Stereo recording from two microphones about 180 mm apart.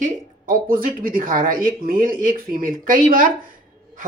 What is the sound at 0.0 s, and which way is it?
Speech, 50° right (ahead or behind).